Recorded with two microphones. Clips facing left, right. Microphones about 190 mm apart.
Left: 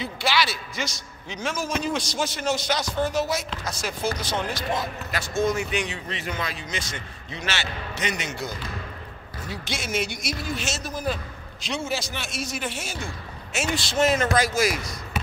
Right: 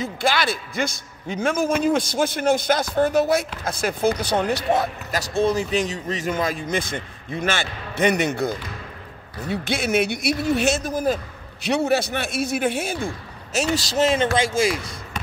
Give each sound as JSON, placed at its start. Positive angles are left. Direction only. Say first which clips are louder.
{"t": 0.0, "sound": "a man's voice", "louder": "right 3 dB", "side_deg": -50}
{"t": 5.1, "sound": "a man's voice", "louder": "right 3 dB", "side_deg": -35}
{"t": 11.6, "sound": "a man's voice", "louder": "right 9 dB", "side_deg": -65}
{"t": 13.5, "sound": "speech", "louder": "right 5 dB", "side_deg": -40}
{"t": 14.0, "sound": "speech", "louder": "right 1 dB", "side_deg": -30}